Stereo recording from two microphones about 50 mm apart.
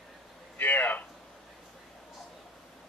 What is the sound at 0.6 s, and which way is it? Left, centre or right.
Speech, left.